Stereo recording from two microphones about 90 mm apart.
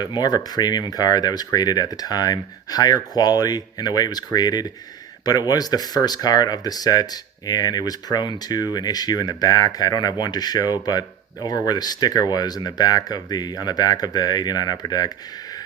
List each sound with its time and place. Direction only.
0.0 s speech: 50° left (ahead or behind)